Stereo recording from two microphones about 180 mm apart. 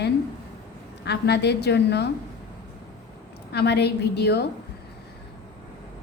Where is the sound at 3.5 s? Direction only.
65° left (ahead or behind).